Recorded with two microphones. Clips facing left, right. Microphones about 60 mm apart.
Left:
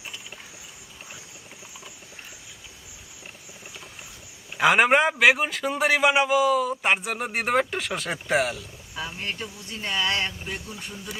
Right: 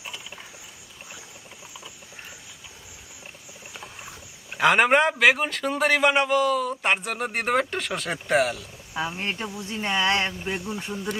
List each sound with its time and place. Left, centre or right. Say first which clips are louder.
4.5 s a man's voice: even; centre
9.0 s speech: right 4 dB; right